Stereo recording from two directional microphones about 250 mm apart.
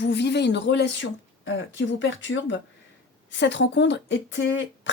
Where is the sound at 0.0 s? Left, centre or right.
Left.